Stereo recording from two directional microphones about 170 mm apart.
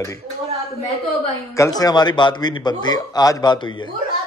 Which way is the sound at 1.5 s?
20° left (ahead or behind).